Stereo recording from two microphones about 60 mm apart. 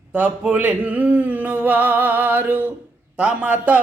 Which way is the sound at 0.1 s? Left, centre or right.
Right.